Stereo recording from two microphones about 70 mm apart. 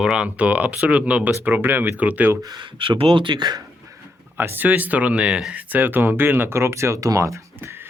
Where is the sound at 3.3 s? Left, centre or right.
Right.